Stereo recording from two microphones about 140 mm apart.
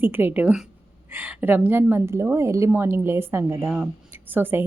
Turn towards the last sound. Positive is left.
turn(degrees=-15)  # may be behind; listen again after turning